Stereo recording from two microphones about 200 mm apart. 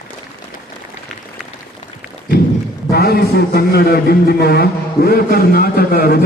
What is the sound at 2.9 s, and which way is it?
A man's voice, 50° left (ahead or behind).